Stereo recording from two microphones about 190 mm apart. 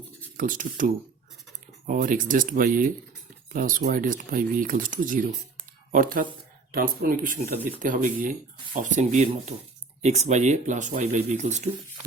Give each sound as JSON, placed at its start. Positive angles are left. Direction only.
{"t": 0.3, "sound": "speech", "side_deg": -45}